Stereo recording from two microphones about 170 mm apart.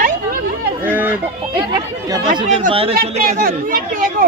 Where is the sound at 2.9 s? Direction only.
60° right (ahead or behind).